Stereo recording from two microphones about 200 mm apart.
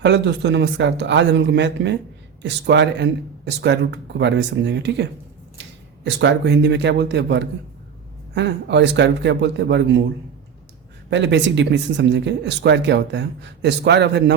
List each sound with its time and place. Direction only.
0.0 s speech: 60° right (ahead or behind)
6.1 s speech: 60° right (ahead or behind)
11.1 s speech: 60° right (ahead or behind)